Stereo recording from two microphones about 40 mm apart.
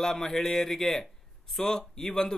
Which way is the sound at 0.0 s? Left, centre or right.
Centre.